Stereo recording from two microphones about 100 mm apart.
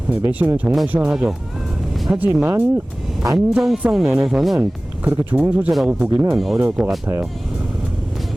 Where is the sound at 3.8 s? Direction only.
5° right (ahead or behind).